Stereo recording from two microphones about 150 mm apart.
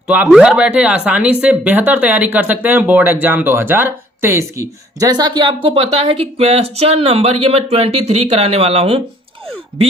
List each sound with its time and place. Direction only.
0.3 s speech: 5° right (ahead or behind); by 9.0 s 40° right (ahead or behind)